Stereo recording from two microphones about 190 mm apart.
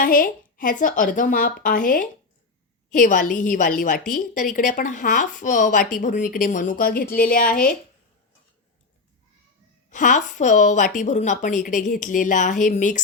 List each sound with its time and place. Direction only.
0.0 s a woman's voice: 50° left (ahead or behind)
9.9 s a woman's voice: 40° left (ahead or behind)